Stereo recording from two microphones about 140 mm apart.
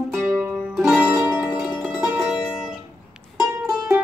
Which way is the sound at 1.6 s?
Centre (ahead or behind).